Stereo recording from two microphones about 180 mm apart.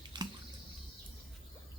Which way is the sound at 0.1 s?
25° right (ahead or behind).